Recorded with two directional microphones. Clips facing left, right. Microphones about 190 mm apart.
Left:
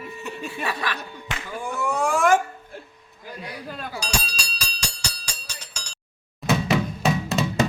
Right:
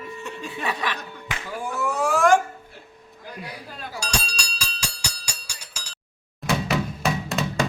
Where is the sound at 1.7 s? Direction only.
5° right (ahead or behind).